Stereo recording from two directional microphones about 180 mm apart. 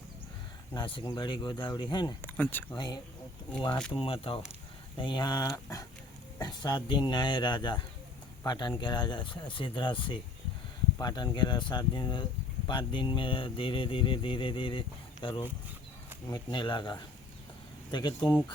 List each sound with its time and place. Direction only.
0.7 s speech: 25° left (ahead or behind)
2.2 s speech: 10° left (ahead or behind)
2.7 s speech: 25° left (ahead or behind)